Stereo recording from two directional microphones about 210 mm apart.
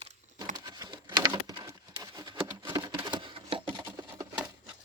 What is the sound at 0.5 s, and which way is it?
Patter, 20° right (ahead or behind).